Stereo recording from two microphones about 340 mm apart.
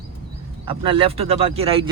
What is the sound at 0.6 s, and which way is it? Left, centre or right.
Speech, centre.